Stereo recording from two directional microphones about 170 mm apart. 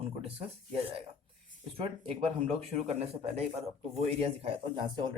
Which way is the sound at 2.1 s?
35° right (ahead or behind).